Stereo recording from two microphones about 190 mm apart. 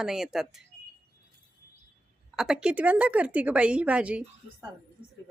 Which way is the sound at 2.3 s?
5° right (ahead or behind).